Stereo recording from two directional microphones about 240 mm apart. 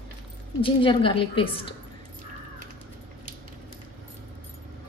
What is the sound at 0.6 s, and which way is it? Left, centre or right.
A woman's voice, left.